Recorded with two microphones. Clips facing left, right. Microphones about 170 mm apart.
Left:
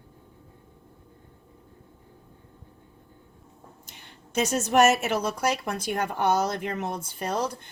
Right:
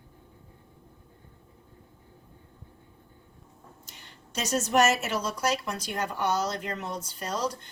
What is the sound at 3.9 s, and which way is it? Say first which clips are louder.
A woman's voice: left 2 dB; 55° left (ahead or behind).